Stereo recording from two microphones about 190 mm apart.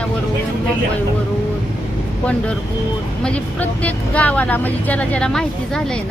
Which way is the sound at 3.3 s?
5° left (ahead or behind).